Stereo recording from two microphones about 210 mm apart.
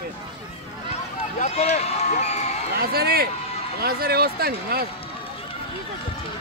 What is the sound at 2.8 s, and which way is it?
Speech, 45° right (ahead or behind).